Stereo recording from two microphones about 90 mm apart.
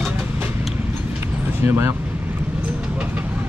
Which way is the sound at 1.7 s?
30° right (ahead or behind).